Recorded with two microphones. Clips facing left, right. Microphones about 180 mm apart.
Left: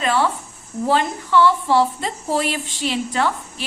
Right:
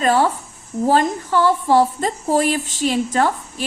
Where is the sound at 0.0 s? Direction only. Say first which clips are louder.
Right 3 dB; 40° right (ahead or behind).